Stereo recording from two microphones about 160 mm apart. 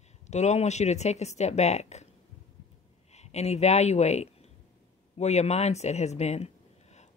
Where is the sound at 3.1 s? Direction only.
45° left (ahead or behind).